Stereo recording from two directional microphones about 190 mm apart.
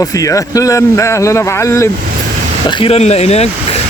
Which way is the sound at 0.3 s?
15° left (ahead or behind).